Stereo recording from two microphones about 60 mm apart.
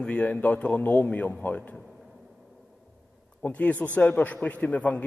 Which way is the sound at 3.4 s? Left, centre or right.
Left.